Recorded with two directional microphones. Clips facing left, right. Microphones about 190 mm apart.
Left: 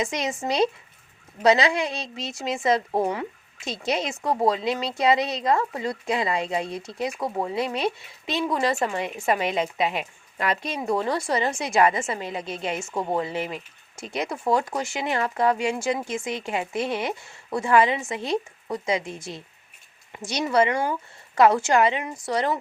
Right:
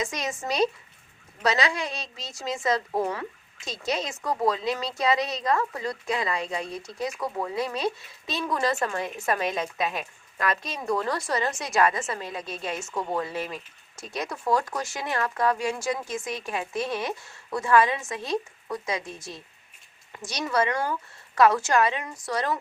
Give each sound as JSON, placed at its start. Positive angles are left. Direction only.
{"t": 0.0, "sound": "a woman's voice", "side_deg": 30}